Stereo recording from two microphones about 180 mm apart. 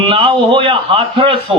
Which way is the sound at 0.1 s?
30° right (ahead or behind).